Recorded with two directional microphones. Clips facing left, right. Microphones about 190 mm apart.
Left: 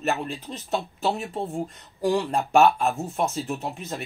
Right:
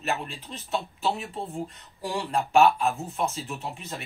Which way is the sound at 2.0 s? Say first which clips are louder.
Left 5 dB; 45° left (ahead or behind).